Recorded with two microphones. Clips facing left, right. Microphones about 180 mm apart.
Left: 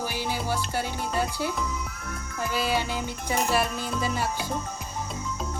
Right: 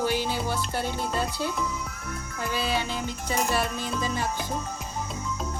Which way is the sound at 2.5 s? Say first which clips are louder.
Left 1 dB; 10° left (ahead or behind).